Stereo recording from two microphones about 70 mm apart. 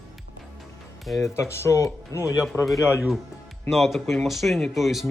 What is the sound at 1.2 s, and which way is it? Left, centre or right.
Speech, left.